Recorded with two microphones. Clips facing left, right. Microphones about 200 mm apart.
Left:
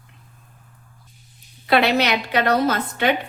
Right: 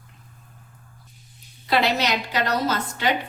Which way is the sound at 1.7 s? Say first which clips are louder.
Left 4 dB; 60° left (ahead or behind).